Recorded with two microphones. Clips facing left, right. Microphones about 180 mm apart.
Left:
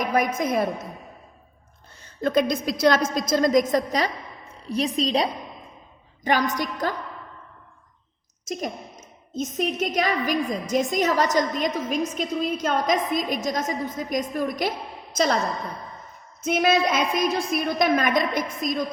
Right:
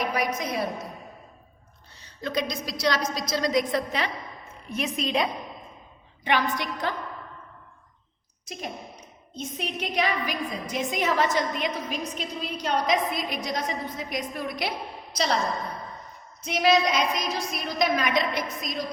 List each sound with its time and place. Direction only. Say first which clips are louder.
0.0 s a woman's voice: left 4 dB; 50° left (ahead or behind)
2.0 s a woman's voice: left 7 dB; 50° left (ahead or behind)
8.4 s a woman's voice: left 6 dB; 45° left (ahead or behind)
16.4 s a woman's voice: left 1 dB; 50° left (ahead or behind)